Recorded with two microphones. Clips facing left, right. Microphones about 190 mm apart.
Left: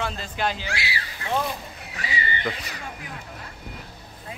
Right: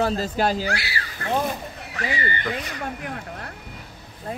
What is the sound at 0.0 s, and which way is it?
Speech, 40° right (ahead or behind).